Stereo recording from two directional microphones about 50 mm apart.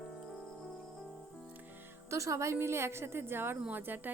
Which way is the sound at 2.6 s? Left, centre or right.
Right.